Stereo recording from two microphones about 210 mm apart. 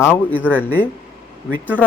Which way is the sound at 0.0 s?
10° left (ahead or behind).